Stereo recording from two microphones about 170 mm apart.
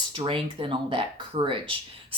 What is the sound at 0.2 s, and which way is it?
Speech, 30° right (ahead or behind).